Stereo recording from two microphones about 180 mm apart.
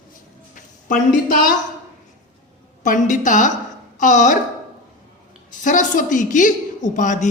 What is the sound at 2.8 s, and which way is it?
A woman's voice, 45° left (ahead or behind).